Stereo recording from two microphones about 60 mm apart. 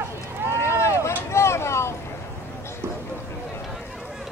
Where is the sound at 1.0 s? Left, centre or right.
Left.